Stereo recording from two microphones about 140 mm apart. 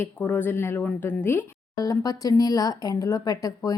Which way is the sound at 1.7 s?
25° left (ahead or behind).